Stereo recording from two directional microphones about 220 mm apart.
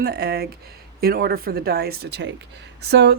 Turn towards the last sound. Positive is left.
turn(degrees=-50)  # may be behind; listen again after turning